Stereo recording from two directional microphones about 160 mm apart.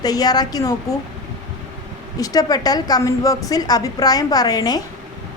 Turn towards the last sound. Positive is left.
turn(degrees=25)  # may be behind; listen again after turning